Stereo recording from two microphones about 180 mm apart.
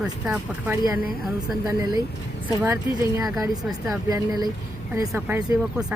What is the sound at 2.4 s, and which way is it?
Speech, 15° right (ahead or behind).